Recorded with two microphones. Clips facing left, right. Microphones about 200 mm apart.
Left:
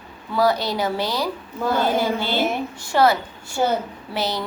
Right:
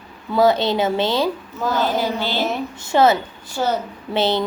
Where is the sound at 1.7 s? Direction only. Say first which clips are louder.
Even; 55° left (ahead or behind).